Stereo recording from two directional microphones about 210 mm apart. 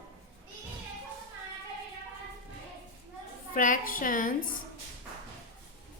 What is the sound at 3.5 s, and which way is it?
Speech, 40° left (ahead or behind).